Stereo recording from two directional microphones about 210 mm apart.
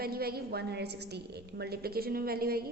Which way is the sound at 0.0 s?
45° right (ahead or behind).